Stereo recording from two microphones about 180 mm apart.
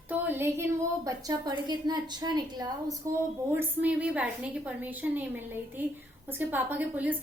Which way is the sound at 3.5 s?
10° right (ahead or behind).